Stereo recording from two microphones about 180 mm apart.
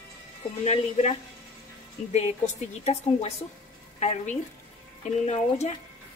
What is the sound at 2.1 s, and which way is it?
A woman's voice, 40° left (ahead or behind).